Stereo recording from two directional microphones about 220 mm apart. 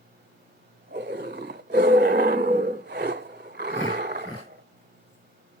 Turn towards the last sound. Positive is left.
turn(degrees=-45)  # may be behind; listen again after turning